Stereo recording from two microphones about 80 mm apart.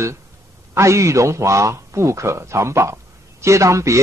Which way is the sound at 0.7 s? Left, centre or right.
Right.